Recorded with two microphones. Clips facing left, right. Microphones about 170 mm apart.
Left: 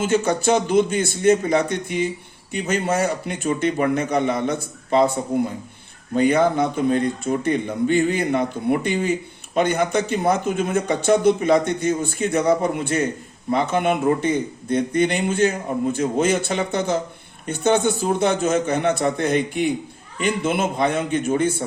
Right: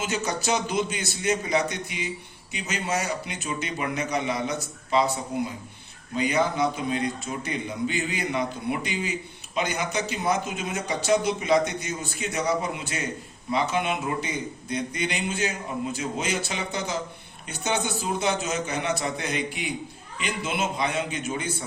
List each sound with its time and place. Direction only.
0.0 s speech: 55° left (ahead or behind)